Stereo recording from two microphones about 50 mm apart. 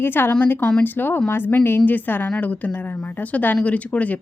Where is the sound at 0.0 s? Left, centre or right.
Left.